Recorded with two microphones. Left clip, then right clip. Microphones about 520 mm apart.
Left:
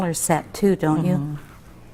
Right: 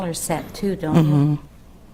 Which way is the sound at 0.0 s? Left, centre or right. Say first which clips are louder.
Left 3 dB; left.